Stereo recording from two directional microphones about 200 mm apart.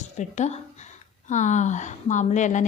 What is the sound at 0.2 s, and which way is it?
A woman's voice, 35° left (ahead or behind).